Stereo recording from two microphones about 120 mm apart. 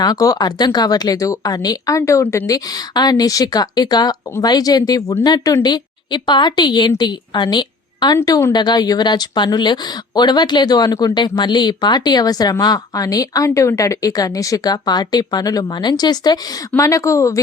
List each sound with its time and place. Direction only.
0.0 s a woman's voice: 30° left (ahead or behind)
2.5 s a woman's voice: 30° left (ahead or behind)